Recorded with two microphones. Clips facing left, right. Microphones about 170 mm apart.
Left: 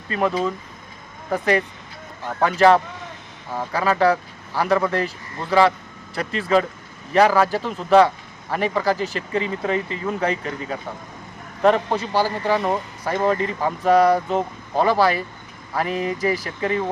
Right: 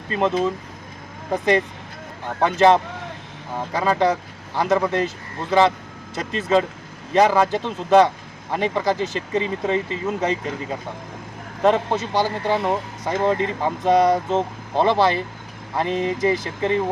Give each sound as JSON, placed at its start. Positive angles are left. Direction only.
{"t": 0.2, "sound": "speech", "side_deg": -20}
{"t": 13.1, "sound": "speech", "side_deg": -20}